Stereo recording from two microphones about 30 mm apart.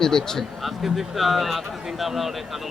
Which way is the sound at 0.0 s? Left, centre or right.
Centre.